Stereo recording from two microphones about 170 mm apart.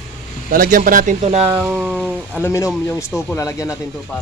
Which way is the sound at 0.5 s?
50° right (ahead or behind).